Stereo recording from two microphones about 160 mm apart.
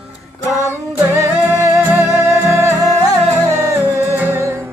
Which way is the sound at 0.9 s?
15° right (ahead or behind).